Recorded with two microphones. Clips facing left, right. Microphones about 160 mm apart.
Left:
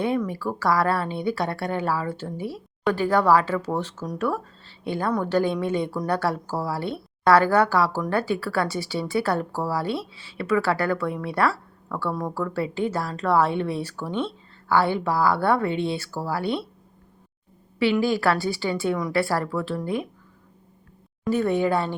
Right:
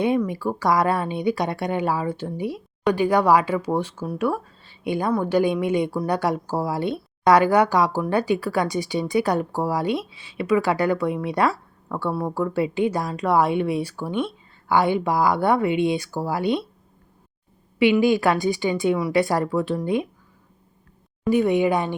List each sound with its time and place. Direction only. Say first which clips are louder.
0.0 s speech: right 3 dB; 15° right (ahead or behind)
17.7 s speech: right 4 dB; 20° right (ahead or behind)
21.2 s speech: right 3 dB; 15° right (ahead or behind)